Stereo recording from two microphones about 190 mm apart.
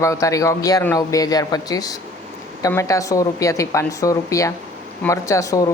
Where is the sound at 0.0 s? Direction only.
15° left (ahead or behind).